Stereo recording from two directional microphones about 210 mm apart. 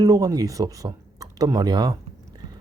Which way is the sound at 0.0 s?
15° right (ahead or behind).